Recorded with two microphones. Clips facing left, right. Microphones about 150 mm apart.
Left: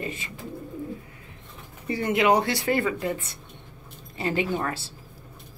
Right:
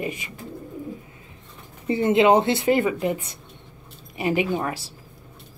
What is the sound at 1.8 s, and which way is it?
A woman's voice, 25° right (ahead or behind).